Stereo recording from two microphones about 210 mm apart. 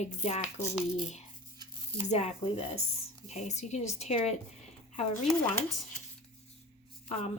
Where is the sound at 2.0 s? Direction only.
30° left (ahead or behind).